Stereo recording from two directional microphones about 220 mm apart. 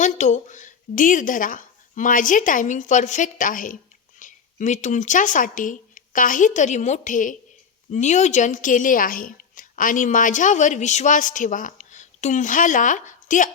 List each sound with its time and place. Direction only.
0.0 s a woman's voice: 35° left (ahead or behind)